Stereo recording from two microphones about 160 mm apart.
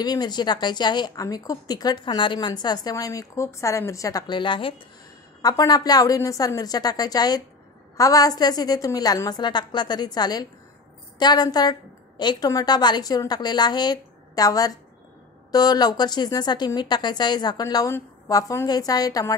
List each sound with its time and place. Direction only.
0.0 s a woman's voice: 25° left (ahead or behind)